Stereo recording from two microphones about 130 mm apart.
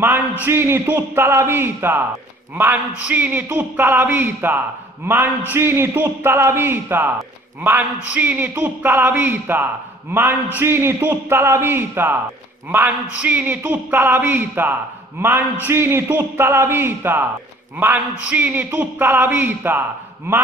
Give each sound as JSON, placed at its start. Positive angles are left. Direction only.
{"t": 0.0, "sound": "a man's voice", "side_deg": -15}